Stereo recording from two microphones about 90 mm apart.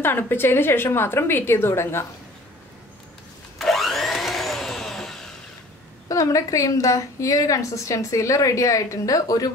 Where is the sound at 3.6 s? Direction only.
Centre (ahead or behind).